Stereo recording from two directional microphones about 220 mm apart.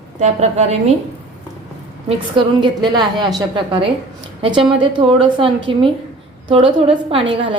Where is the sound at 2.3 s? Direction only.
20° right (ahead or behind).